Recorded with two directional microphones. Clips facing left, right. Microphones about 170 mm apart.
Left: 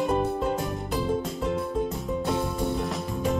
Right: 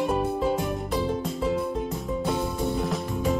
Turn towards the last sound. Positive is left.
turn(degrees=0)  # may be behind; listen again after turning